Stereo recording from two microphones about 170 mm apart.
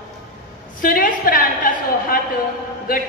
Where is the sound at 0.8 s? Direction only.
55° left (ahead or behind).